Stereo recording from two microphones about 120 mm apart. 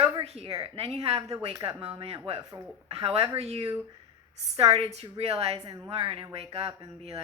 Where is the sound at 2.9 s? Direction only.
55° right (ahead or behind).